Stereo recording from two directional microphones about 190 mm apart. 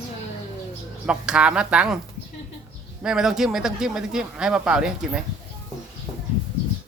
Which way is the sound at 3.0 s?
5° right (ahead or behind).